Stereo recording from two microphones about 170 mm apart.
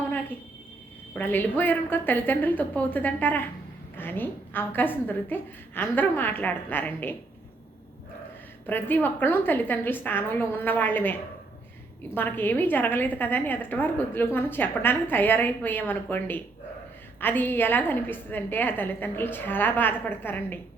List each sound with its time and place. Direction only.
1.1 s a woman's voice: 10° left (ahead or behind)
8.6 s a woman's voice: 10° left (ahead or behind)